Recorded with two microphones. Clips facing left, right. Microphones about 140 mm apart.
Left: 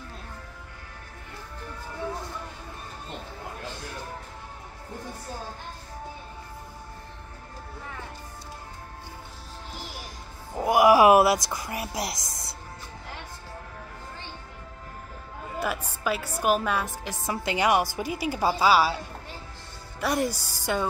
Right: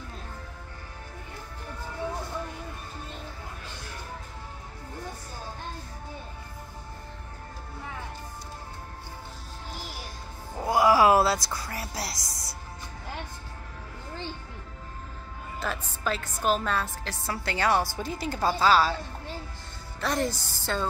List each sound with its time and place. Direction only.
10.6 s music: 15° left (ahead or behind)
15.6 s a woman's voice: 10° left (ahead or behind)
20.0 s a woman's voice: 10° left (ahead or behind)